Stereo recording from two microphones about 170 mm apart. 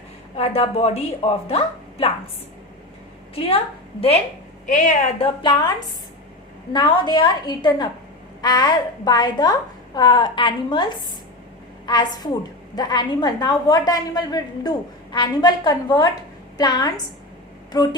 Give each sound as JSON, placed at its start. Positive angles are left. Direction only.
{"t": 0.3, "sound": "a woman's voice", "side_deg": 40}
{"t": 3.3, "sound": "a woman's voice", "side_deg": 35}
{"t": 4.6, "sound": "a woman's voice", "side_deg": 45}
{"t": 6.7, "sound": "a woman's voice", "side_deg": 25}